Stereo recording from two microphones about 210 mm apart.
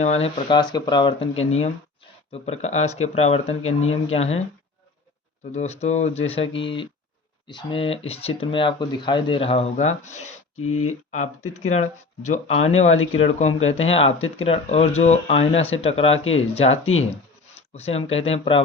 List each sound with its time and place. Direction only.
0.0 s speech: 30° left (ahead or behind)
3.5 s speech: 75° left (ahead or behind)
4.0 s speech: 30° left (ahead or behind)
5.5 s speech: 30° left (ahead or behind)
10.6 s speech: 90° left
11.5 s speech: 30° left (ahead or behind)
13.6 s speech: 70° left (ahead or behind)
13.9 s speech: 25° left (ahead or behind)
16.1 s speech: 70° left (ahead or behind)
17.7 s speech: 30° left (ahead or behind)